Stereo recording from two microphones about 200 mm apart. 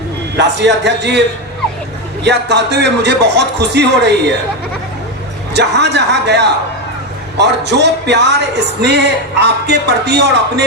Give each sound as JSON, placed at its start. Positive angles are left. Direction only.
{"t": 0.3, "sound": "speech", "side_deg": -60}
{"t": 2.2, "sound": "speech", "side_deg": -60}
{"t": 5.5, "sound": "speech", "side_deg": -60}